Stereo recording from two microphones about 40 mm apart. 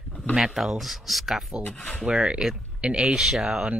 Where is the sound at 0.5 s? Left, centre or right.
Centre.